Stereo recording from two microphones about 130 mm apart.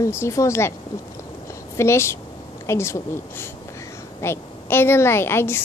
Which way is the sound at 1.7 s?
20° left (ahead or behind).